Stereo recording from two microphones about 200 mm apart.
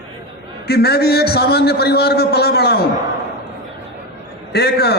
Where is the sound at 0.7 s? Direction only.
55° left (ahead or behind).